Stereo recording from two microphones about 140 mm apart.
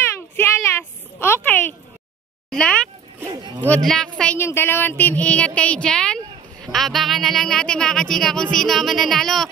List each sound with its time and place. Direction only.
0.4 s a sound: 15° left (ahead or behind)
3.6 s a woman's voice: 5° left (ahead or behind)
4.4 s a woman's voice: 15° left (ahead or behind)